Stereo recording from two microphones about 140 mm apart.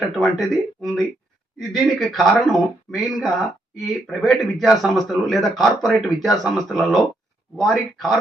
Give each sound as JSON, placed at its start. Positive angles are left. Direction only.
{"t": 0.0, "sound": "speech", "side_deg": 0}